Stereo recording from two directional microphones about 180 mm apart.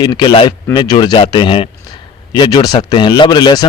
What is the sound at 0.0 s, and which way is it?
Speech, 25° left (ahead or behind).